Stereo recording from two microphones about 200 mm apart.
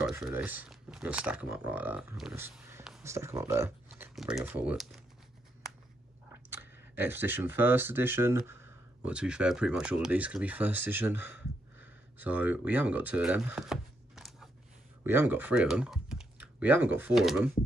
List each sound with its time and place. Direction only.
0.0 s speech: 10° right (ahead or behind)
3.0 s speech: 15° right (ahead or behind)
4.1 s speech: centre (ahead or behind)
6.5 s speech: 10° right (ahead or behind)